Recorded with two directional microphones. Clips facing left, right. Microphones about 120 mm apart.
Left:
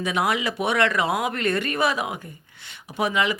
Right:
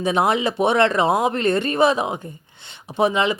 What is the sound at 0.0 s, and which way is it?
Speech, 30° right (ahead or behind).